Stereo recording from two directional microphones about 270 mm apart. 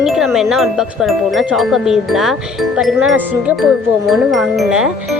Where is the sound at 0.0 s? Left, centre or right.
Centre.